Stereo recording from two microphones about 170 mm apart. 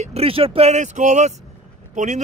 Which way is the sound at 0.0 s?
35° right (ahead or behind).